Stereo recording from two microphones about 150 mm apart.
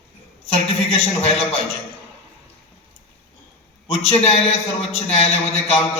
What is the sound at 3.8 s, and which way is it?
A man's voice, 40° left (ahead or behind).